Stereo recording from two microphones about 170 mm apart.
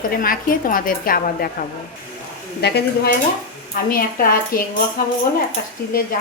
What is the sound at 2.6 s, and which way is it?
Speech, 70° left (ahead or behind).